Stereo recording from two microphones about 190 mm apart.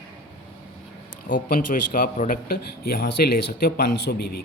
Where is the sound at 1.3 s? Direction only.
45° left (ahead or behind).